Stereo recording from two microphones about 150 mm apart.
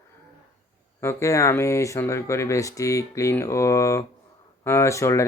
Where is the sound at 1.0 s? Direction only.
20° left (ahead or behind).